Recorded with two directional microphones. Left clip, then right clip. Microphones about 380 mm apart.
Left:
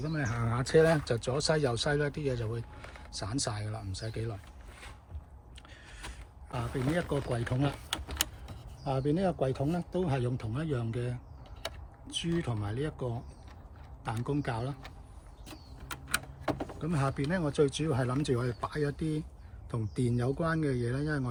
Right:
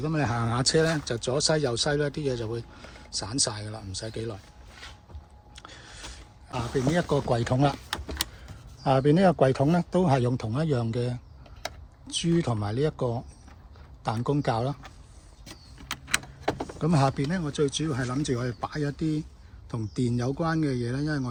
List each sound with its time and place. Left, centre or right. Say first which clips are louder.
0.0 s speech: right 7 dB; centre
5.5 s a sound: right 8 dB; centre
6.5 s speech: right 6 dB; centre
8.8 s speech: right 10 dB; centre
14.3 s speech: right 8 dB; centre
16.7 s speech: right 8 dB; centre